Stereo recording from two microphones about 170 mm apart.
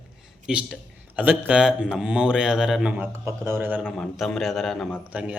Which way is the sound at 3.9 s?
Centre (ahead or behind).